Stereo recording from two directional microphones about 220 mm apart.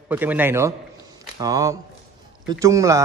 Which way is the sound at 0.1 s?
10° right (ahead or behind).